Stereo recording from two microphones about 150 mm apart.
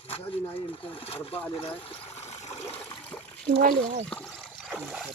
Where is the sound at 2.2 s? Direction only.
45° left (ahead or behind).